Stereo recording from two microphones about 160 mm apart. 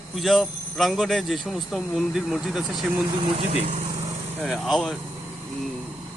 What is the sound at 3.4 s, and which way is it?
Speech, 40° right (ahead or behind).